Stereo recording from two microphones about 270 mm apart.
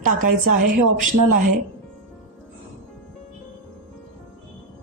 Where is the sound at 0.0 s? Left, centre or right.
Right.